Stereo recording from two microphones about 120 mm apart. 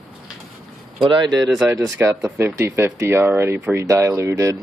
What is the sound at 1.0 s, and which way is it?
Speech, 45° right (ahead or behind).